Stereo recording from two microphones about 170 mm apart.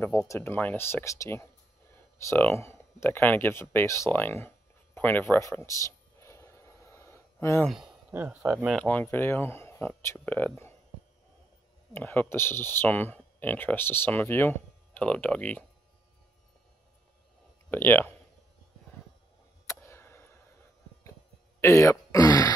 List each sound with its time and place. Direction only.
0.0 s speech: 15° left (ahead or behind)
2.1 s a sound: 15° left (ahead or behind)
7.6 s speech: centre (ahead or behind)
8.1 s speech: 10° right (ahead or behind)
8.6 s speech: 5° left (ahead or behind)
11.9 s speech: 10° left (ahead or behind)
17.6 s speech: 10° left (ahead or behind)
19.7 s a sound: 15° left (ahead or behind)
21.5 s a sound: 15° left (ahead or behind)